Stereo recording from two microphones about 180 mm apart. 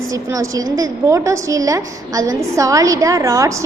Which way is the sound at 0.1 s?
20° right (ahead or behind).